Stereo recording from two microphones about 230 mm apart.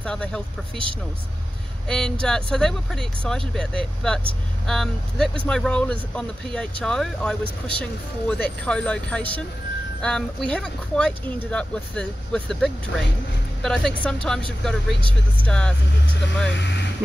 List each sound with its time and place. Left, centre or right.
0.0 s speech: centre
1.9 s speech: centre
16.4 s speech: left